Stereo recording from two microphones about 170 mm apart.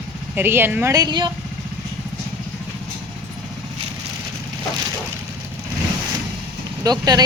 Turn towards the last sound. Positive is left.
turn(degrees=-25)  # may be behind; listen again after turning